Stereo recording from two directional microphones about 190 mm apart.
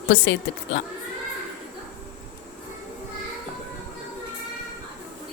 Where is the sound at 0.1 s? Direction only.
75° left (ahead or behind).